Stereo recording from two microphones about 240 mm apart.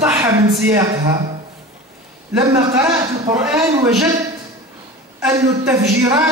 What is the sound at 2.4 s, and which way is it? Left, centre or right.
A man's voice, centre.